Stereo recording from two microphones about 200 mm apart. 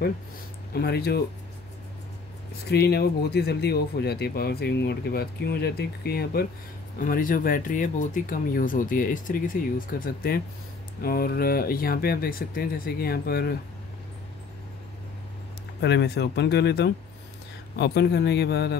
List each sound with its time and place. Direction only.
0.7 s speech: 50° left (ahead or behind)
2.6 s speech: 55° left (ahead or behind)
15.8 s speech: 55° left (ahead or behind)